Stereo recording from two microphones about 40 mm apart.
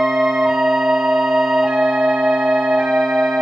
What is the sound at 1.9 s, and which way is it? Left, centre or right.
Music, centre.